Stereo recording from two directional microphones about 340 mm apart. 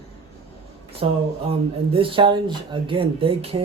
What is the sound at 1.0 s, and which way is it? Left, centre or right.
Speech, centre.